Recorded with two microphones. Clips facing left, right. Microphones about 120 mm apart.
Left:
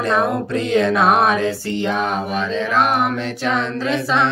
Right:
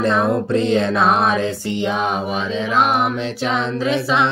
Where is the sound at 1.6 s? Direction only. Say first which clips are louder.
Even; 15° right (ahead or behind).